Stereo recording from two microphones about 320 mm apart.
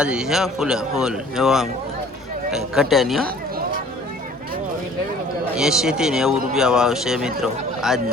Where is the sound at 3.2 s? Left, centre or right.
Right.